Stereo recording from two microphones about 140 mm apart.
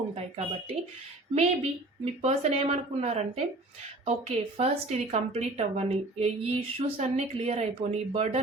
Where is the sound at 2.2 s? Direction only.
50° right (ahead or behind).